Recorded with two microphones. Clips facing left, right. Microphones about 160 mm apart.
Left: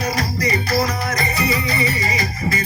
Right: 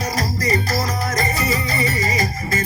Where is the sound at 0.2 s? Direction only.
40° right (ahead or behind).